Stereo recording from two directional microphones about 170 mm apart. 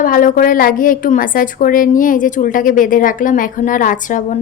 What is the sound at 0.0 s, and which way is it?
A woman's voice, 55° left (ahead or behind).